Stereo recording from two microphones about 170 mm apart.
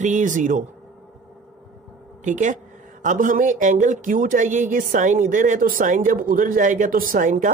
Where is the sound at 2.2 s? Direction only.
45° right (ahead or behind).